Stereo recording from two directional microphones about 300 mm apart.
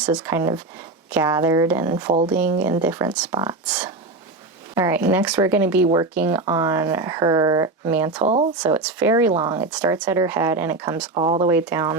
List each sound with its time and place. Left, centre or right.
0.0 s speech: centre
8.2 s speech: right
8.7 s speech: centre
11.1 s speech: centre